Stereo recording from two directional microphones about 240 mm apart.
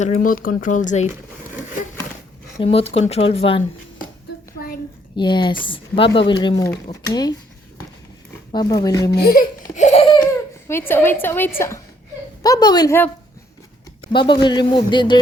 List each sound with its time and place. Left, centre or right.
0.0 s speech: left
2.6 s speech: left
5.1 s speech: centre
8.5 s a woman's voice: centre
9.1 s a sound: left
10.7 s a woman's voice: centre